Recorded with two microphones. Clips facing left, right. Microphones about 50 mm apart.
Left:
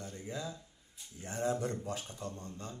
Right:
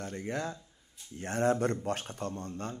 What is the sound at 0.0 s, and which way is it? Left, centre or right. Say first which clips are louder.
Speech: right 6 dB; right.